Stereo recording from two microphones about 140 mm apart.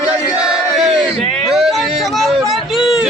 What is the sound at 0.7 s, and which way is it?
Speech, centre (ahead or behind).